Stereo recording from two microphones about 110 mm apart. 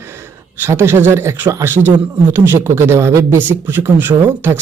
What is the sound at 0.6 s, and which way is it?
A man's voice, 20° right (ahead or behind).